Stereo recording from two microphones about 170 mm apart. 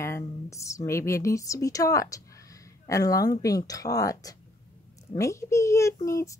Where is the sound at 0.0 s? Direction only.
15° left (ahead or behind).